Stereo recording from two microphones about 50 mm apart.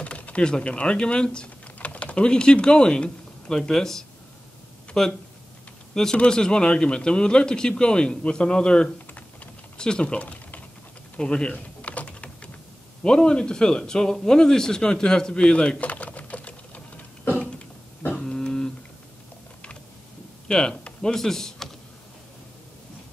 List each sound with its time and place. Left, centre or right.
0.0 s speech: left
1.8 s speech: left; by 5.1 s centre
6.1 s speech: centre
11.5 s typing: left
13.0 s speech: centre
18.2 s a sound: centre
20.4 s speech: centre